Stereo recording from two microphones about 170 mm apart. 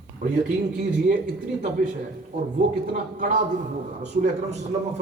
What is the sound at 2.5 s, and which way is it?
Speech, 50° right (ahead or behind).